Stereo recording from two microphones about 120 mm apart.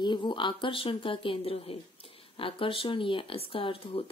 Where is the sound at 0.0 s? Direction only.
40° left (ahead or behind).